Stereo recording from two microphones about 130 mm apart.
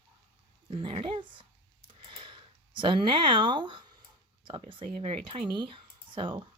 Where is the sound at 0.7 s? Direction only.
40° right (ahead or behind).